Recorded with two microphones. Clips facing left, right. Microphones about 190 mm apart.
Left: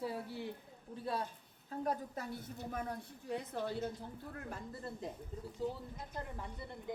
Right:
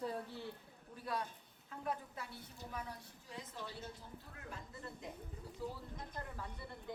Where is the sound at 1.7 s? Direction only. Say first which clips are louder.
Left 5 dB; 40° left (ahead or behind); by 3.8 s 60° left (ahead or behind).